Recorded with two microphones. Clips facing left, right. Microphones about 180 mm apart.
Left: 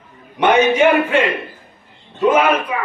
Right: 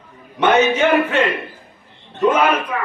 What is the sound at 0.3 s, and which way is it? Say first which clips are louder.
A man's voice: left 2 dB; 10° left (ahead or behind).